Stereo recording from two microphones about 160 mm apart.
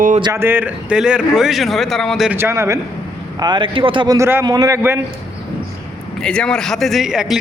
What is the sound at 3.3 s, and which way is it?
Speech, 25° right (ahead or behind).